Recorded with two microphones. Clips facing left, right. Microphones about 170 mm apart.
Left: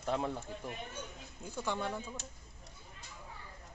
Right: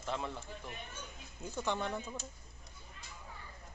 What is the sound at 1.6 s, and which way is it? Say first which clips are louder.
Speech: even; 10° left (ahead or behind).